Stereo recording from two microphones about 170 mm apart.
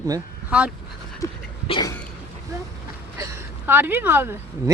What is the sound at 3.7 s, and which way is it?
Speech, 10° right (ahead or behind).